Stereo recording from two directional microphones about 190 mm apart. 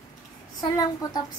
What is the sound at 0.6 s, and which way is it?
Speech, 20° left (ahead or behind).